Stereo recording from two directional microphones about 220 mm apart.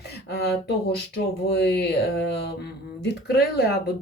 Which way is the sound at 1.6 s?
50° left (ahead or behind).